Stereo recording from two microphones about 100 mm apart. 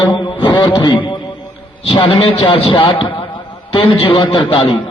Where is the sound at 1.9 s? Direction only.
65° left (ahead or behind).